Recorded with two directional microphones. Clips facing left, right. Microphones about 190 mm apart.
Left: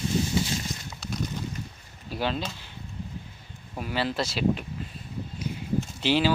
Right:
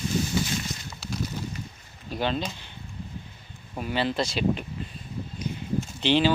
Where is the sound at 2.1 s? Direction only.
5° left (ahead or behind).